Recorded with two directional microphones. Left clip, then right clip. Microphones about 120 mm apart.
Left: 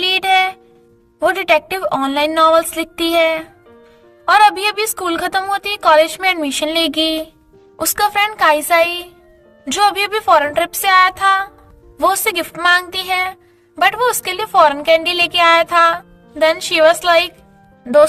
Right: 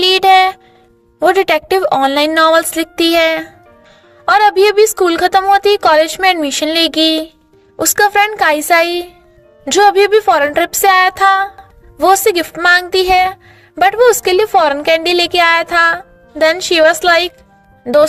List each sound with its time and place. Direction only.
0.0 s music: 60° right (ahead or behind)
1.3 s a woman's voice: 45° right (ahead or behind)